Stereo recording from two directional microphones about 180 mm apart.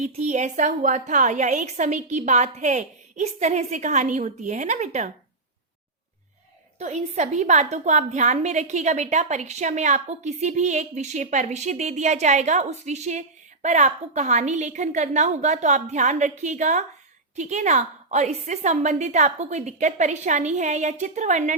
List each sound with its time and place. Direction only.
0.0 s speech: 40° right (ahead or behind)
6.7 s speech: 40° right (ahead or behind)